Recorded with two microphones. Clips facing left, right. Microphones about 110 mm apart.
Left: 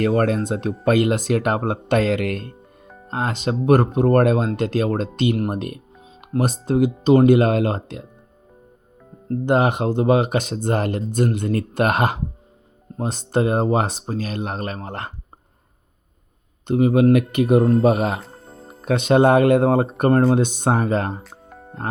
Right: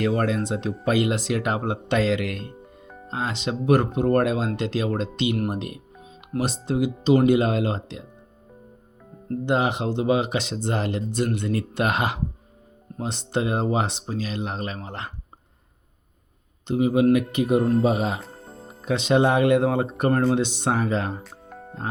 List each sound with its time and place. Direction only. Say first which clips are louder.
0.0 s speech: left 4 dB; 50° left (ahead or behind)
2.8 s music: left 2 dB; centre (ahead or behind)
3.1 s speech: left 4 dB; 50° left (ahead or behind)
6.0 s music: left 5 dB; 30° left (ahead or behind)
6.4 s speech: left 5 dB; 45° left (ahead or behind)
9.5 s speech: left 5 dB; 50° left (ahead or behind)
16.6 s speech: left 3 dB; 50° left (ahead or behind)
18.2 s music: even; centre (ahead or behind)
18.9 s speech: left 5 dB; 50° left (ahead or behind)
21.2 s music: right 1 dB; centre (ahead or behind)